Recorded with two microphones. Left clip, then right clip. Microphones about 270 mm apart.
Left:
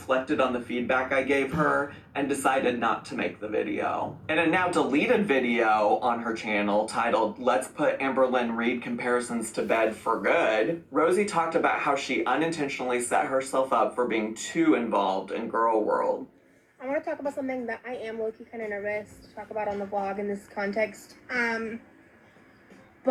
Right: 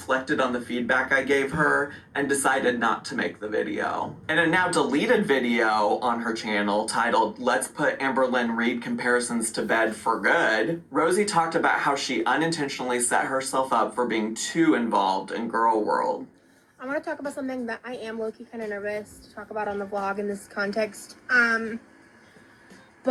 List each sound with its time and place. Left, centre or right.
0.0 s speech: right